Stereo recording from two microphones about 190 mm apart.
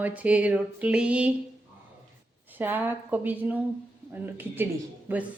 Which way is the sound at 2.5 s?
10° right (ahead or behind).